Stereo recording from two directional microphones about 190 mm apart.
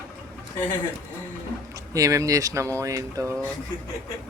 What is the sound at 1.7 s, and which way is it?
Speech, 15° right (ahead or behind).